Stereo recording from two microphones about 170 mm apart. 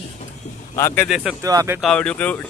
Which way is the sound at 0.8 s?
15° left (ahead or behind).